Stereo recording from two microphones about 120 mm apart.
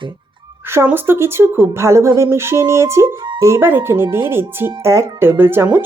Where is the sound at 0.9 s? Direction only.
20° right (ahead or behind).